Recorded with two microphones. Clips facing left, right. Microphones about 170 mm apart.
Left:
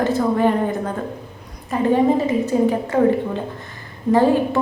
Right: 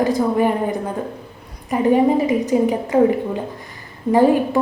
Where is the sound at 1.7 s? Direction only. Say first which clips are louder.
Right 1 dB; 15° right (ahead or behind).